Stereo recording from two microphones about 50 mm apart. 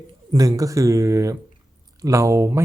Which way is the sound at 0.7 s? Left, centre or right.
Right.